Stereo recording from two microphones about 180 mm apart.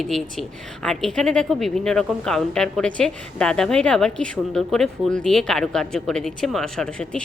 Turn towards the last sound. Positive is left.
turn(degrees=5)  # may be behind; listen again after turning